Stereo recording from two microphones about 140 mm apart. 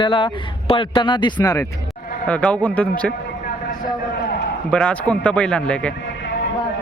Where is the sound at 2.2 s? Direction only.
10° left (ahead or behind).